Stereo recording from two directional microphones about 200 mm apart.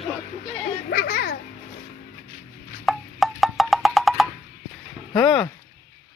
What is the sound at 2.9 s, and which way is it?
Wood block, centre (ahead or behind).